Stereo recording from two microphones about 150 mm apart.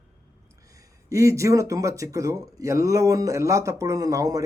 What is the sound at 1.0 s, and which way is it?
Speech, 20° right (ahead or behind).